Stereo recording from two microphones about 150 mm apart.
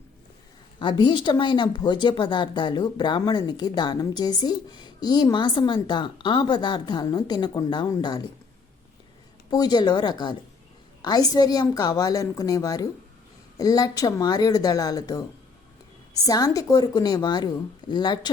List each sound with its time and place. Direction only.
0.8 s speech: 30° left (ahead or behind)
9.5 s speech: 25° left (ahead or behind)
16.2 s speech: 25° left (ahead or behind)